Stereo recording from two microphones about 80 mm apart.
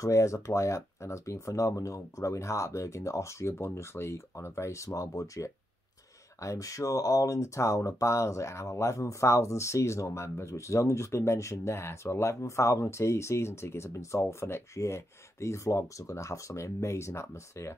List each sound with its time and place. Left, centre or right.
0.0 s speech: left